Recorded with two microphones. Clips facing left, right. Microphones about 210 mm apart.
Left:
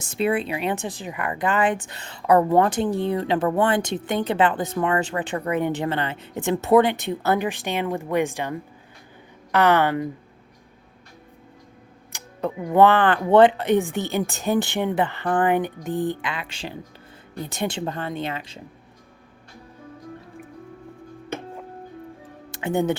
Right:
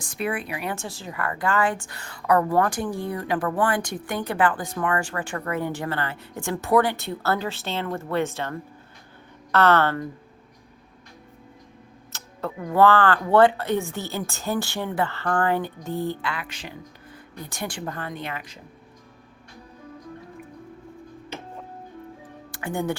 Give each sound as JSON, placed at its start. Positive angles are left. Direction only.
{"t": 0.0, "sound": "speech", "side_deg": 25}
{"t": 12.1, "sound": "speech", "side_deg": 15}
{"t": 21.3, "sound": "music", "side_deg": 55}
{"t": 22.5, "sound": "speech", "side_deg": 20}